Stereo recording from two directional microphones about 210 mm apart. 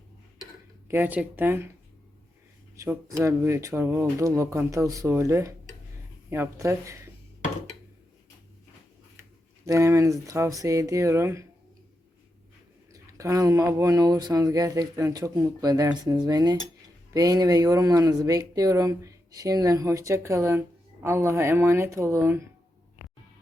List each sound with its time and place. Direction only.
0.9 s speech: 10° right (ahead or behind)
2.7 s speech: 15° right (ahead or behind)
9.6 s speech: 15° right (ahead or behind)
12.9 s speech: 15° right (ahead or behind)